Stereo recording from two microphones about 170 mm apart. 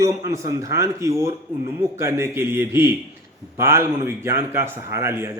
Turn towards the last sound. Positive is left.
turn(degrees=-15)  # may be behind; listen again after turning